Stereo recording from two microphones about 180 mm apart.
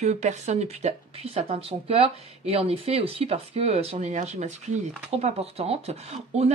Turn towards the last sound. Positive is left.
turn(degrees=-35)  # may be behind; listen again after turning